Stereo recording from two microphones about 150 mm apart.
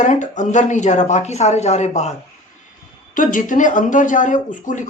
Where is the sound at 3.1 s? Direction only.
60° left (ahead or behind).